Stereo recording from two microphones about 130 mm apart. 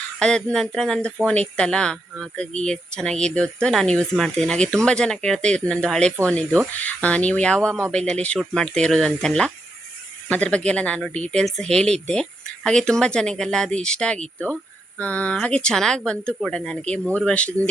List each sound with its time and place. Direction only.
0.2 s speech: 5° left (ahead or behind)